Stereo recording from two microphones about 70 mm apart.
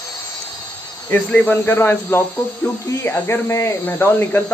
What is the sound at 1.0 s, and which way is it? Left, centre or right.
Speech, left.